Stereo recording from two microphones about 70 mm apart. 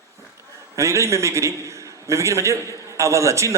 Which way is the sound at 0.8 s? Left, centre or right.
Right.